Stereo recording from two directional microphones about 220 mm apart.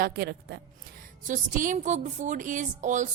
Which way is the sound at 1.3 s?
35° right (ahead or behind).